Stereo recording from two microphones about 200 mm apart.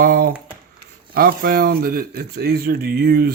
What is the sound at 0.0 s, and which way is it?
Speech, 50° right (ahead or behind).